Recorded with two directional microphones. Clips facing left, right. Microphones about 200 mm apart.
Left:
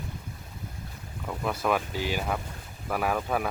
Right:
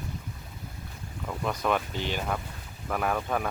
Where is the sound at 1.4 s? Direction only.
5° left (ahead or behind).